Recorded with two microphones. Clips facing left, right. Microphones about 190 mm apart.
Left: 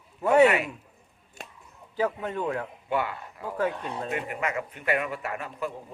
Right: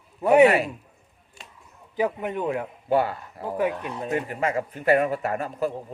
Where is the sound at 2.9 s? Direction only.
40° right (ahead or behind).